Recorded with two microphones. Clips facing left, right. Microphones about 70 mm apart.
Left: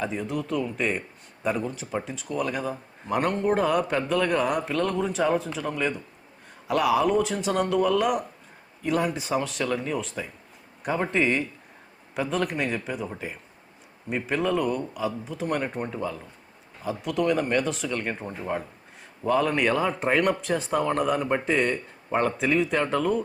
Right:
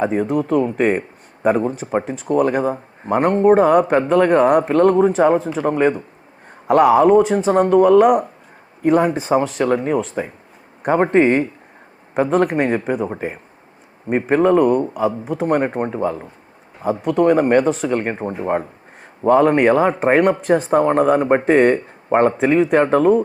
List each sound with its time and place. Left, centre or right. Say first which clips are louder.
0.0 s speech: right 11 dB; right